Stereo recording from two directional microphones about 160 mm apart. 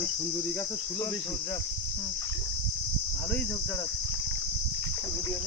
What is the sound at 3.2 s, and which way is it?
Cricket, 10° left (ahead or behind).